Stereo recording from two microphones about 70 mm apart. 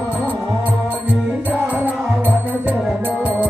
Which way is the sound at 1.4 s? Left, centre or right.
Right.